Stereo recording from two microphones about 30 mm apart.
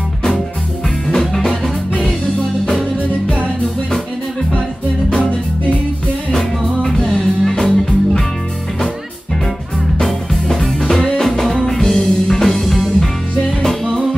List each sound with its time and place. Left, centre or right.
1.0 s music: centre
7.0 s music: centre
7.6 s music: centre
10.5 s music: centre
12.5 s music: centre